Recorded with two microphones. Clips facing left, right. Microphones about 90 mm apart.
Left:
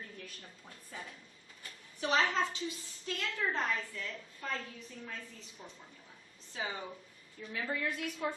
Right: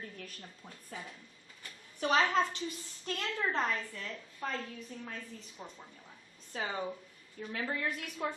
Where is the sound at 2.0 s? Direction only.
50° right (ahead or behind).